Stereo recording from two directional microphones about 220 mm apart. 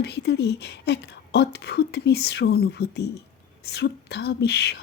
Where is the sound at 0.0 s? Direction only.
50° left (ahead or behind).